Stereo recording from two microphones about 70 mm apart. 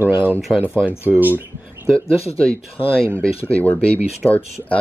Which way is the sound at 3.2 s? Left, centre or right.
Left.